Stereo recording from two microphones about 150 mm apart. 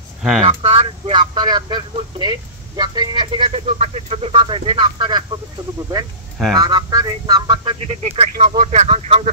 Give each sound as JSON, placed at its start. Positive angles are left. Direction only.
{"t": 0.4, "sound": "speech", "side_deg": -40}
{"t": 6.5, "sound": "speech", "side_deg": -25}